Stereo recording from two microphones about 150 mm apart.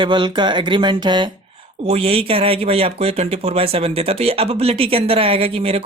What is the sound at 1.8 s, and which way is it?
Speech, 45° right (ahead or behind).